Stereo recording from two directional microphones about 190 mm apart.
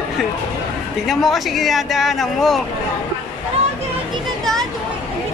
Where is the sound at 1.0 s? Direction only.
Centre (ahead or behind).